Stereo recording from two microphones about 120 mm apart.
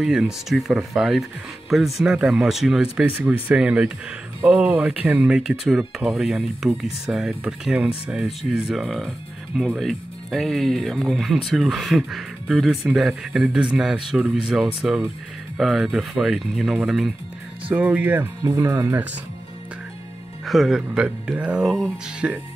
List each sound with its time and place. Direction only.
0.0 s speech: 5° right (ahead or behind)
18.4 s speech: 25° right (ahead or behind)
20.4 s speech: centre (ahead or behind)